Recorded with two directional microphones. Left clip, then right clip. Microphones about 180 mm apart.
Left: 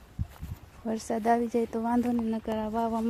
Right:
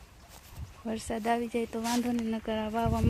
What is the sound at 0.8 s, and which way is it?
Speech, 20° left (ahead or behind).